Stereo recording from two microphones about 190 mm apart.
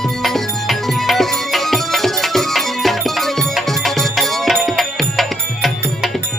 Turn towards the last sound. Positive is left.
turn(degrees=0)  # may be behind; listen again after turning